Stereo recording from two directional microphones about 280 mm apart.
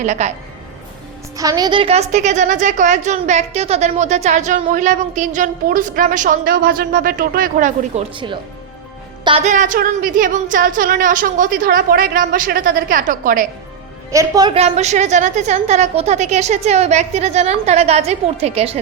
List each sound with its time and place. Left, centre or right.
0.0 s a woman's voice: right
1.4 s a woman's voice: centre; by 13.5 s right
14.1 s a woman's voice: centre